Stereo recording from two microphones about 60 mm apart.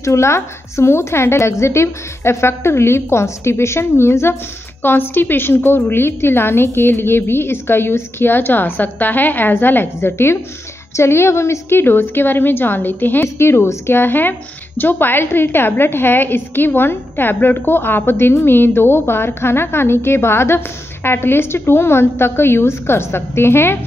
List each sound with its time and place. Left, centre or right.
0.0 s a woman's voice: left